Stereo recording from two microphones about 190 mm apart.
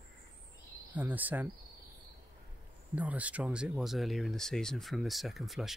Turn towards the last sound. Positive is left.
turn(degrees=0)  # may be behind; listen again after turning